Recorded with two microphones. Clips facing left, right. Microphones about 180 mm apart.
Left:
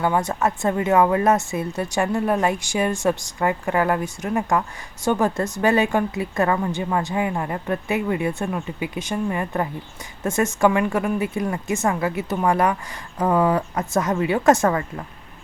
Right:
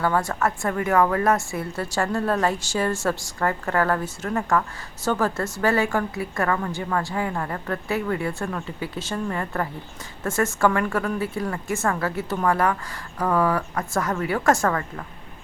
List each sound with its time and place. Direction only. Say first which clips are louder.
0.0 s a woman's voice: left 2 dB; 20° left (ahead or behind)